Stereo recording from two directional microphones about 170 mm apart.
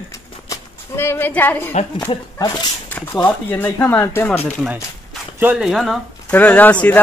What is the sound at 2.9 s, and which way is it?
Speech, 10° left (ahead or behind).